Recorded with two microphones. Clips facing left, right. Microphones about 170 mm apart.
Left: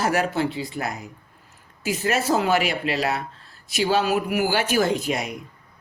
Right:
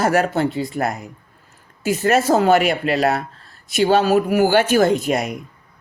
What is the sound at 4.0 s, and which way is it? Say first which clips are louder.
Speech: right 7 dB; 40° right (ahead or behind).